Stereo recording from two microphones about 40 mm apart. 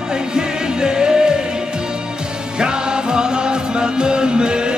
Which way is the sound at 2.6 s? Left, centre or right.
Centre.